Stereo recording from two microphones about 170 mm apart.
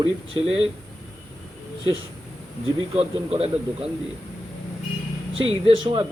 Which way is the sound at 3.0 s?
35° right (ahead or behind).